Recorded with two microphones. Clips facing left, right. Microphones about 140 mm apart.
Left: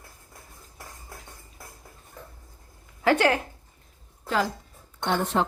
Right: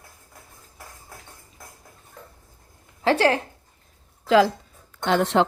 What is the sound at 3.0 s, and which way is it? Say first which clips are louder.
Speech: right 2 dB; 30° right (ahead or behind).